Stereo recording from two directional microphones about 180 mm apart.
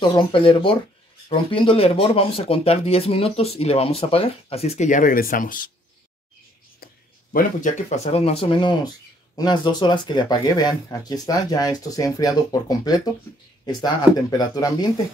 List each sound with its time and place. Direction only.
0.1 s speech: 30° left (ahead or behind); by 5.7 s 50° left (ahead or behind)
7.3 s speech: 40° left (ahead or behind); by 14.9 s 20° left (ahead or behind)